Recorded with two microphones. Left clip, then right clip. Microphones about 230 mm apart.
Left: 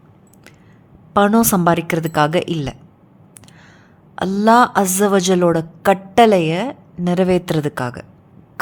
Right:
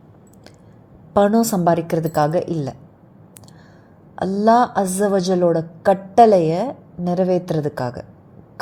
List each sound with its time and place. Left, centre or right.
1.1 s a woman's voice: centre
4.1 s a woman's voice: centre